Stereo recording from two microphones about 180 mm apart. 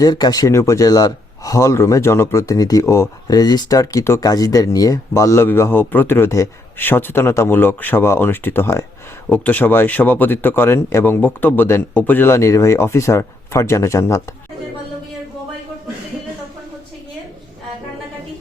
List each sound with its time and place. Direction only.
0.0 s speech: 20° left (ahead or behind)